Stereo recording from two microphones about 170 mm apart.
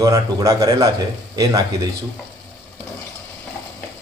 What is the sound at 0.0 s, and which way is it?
Speech, 20° right (ahead or behind).